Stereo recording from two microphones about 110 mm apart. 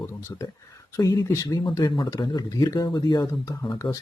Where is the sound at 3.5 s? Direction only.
30° left (ahead or behind).